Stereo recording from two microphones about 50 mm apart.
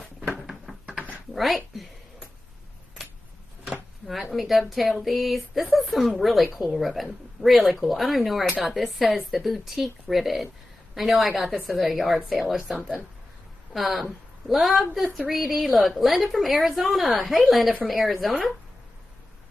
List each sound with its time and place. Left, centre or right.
0.8 s a sound: right
1.3 s speech: centre
4.1 s speech: centre
13.7 s speech: centre